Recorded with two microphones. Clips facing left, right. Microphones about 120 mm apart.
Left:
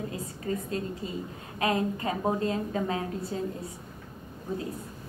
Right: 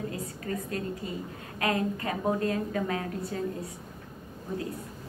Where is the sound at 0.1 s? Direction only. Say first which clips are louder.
Left 1 dB; 25° left (ahead or behind).